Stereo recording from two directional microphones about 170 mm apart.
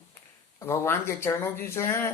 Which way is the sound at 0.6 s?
15° left (ahead or behind).